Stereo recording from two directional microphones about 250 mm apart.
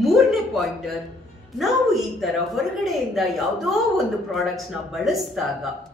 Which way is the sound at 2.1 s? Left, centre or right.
Centre.